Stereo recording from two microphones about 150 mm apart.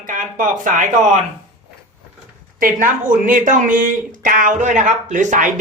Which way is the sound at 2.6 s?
65° right (ahead or behind).